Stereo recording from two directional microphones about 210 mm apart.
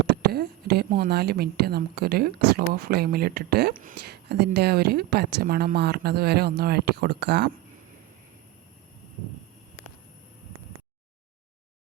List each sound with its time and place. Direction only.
0.1 s speech: 50° right (ahead or behind)